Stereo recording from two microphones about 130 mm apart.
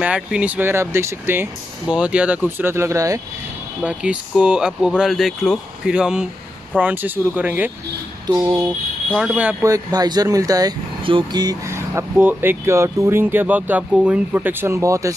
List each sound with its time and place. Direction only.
0.0 s speech: 10° right (ahead or behind); by 3.2 s 25° right (ahead or behind)
3.8 s speech: 10° right (ahead or behind)
9.3 s speech: 10° right (ahead or behind)
9.6 s speech: 25° right (ahead or behind)
11.1 s speech: 40° right (ahead or behind)
11.4 s speech: 20° right (ahead or behind)